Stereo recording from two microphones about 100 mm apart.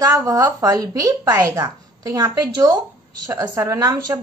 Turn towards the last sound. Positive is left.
turn(degrees=-35)  # may be behind; listen again after turning